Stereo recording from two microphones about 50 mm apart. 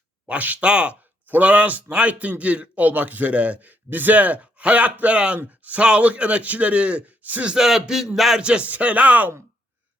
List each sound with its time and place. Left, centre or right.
0.3 s a man's voice: right
0.6 s a man's voice: right
7.5 s a sound: centre
8.4 s speech: right